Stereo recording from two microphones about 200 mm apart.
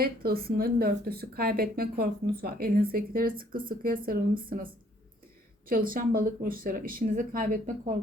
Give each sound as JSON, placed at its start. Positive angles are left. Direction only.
{"t": 0.0, "sound": "speech", "side_deg": -50}